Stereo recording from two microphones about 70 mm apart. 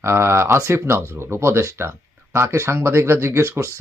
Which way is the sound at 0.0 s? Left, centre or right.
Right.